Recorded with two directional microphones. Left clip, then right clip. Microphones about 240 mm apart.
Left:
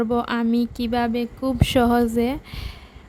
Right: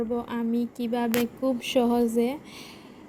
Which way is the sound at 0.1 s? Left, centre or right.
Left.